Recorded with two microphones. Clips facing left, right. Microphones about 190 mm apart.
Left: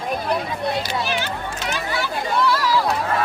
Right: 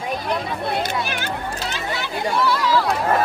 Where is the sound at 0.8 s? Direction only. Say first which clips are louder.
Even; 55° right (ahead or behind).